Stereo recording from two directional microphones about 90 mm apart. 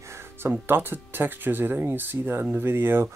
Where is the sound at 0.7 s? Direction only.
25° right (ahead or behind).